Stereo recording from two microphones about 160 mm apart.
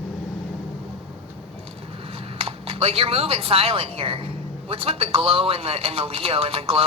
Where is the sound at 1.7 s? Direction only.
40° right (ahead or behind).